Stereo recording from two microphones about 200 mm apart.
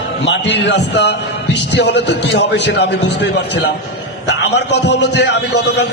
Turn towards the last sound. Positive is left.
turn(degrees=55)  # may be behind; listen again after turning